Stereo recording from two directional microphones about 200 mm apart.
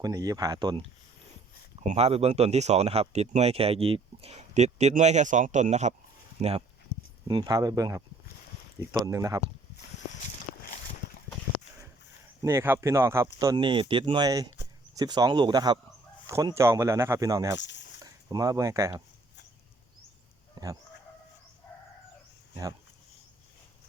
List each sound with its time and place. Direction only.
0.0 s speech: 15° right (ahead or behind)
1.8 s speech: 35° right (ahead or behind)
7.3 s speech: 20° right (ahead or behind)
9.0 s speech: 15° right (ahead or behind)
12.4 s speech: 15° right (ahead or behind)
20.6 s chicken: 20° right (ahead or behind)